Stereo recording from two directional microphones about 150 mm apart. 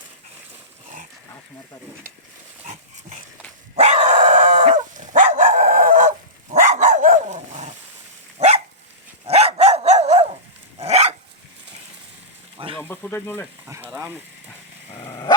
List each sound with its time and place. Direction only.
3.8 s dog: 45° right (ahead or behind)
12.8 s speech: 15° left (ahead or behind)
13.7 s speech: 20° right (ahead or behind)
15.0 s dog: 25° left (ahead or behind)